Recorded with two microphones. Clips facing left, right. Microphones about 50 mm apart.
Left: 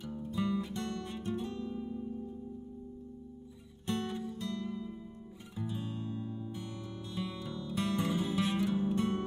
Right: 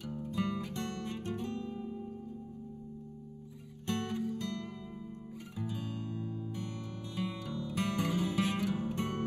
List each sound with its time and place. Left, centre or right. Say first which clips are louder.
0.4 s music: left 2 dB; right
3.9 s music: right 1 dB; right
5.6 s music: left 1 dB; centre
7.2 s music: right 1 dB; right
8.0 s music: right 1 dB; centre
8.7 s music: left 4 dB; right